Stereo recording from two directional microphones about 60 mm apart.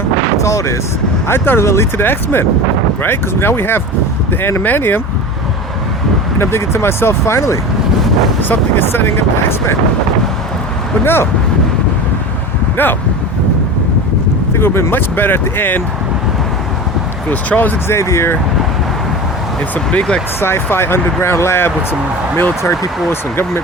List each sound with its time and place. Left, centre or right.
0.4 s speech: left
1.3 s speech: left
6.4 s speech: left
7.3 s speech: left
8.4 s speech: left
11.0 s speech: left
12.7 s speech: left
14.5 s speech: left
17.2 s speech: left
17.8 s speech: left
19.7 s speech: centre
20.4 s speech: left